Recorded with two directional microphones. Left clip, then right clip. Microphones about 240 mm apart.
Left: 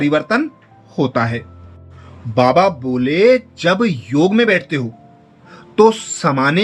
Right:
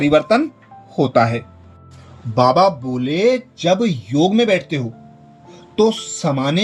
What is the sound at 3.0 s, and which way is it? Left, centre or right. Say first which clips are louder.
Speech: left 8 dB; left.